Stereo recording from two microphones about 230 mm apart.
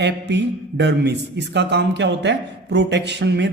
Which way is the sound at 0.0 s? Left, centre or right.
Right.